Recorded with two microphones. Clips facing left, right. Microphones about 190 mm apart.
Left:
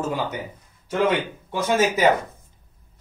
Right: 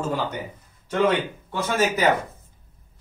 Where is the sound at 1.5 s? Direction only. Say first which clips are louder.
Left 3 dB; 15° left (ahead or behind).